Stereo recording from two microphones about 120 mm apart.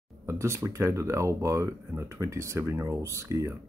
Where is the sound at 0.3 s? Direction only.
25° right (ahead or behind).